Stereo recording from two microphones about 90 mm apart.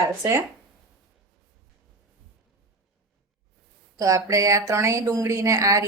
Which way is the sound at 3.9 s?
40° right (ahead or behind).